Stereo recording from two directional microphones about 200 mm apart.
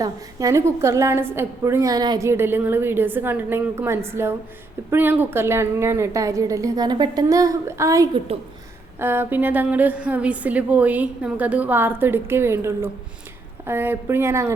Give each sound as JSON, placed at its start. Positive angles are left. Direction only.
{"t": 0.0, "sound": "a woman's voice", "side_deg": -15}